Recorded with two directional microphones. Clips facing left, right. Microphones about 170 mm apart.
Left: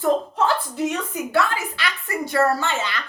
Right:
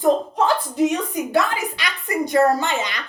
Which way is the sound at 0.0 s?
15° right (ahead or behind).